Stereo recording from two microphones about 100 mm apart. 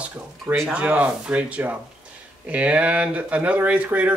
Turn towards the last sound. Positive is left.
turn(degrees=-15)  # may be behind; listen again after turning